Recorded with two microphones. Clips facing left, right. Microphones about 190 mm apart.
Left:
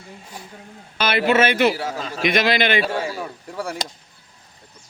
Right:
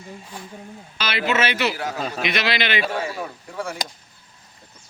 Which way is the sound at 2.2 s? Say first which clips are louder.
Left 7 dB; 50° left (ahead or behind).